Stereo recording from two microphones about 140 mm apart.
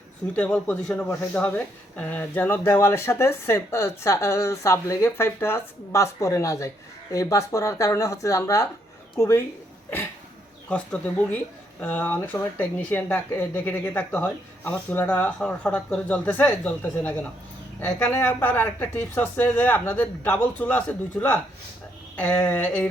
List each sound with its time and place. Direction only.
0.3 s speech: 10° left (ahead or behind)
10.7 s speech: 10° left (ahead or behind)